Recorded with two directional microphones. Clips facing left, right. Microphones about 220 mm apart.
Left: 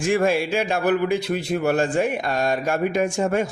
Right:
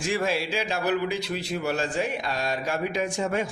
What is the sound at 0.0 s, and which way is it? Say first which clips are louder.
Speech: left 7 dB; 50° left (ahead or behind).